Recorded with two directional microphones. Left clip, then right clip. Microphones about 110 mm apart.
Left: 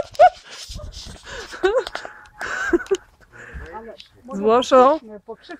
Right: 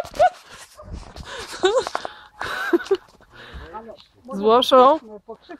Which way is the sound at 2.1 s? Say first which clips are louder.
Left 1 dB; 20° right (ahead or behind).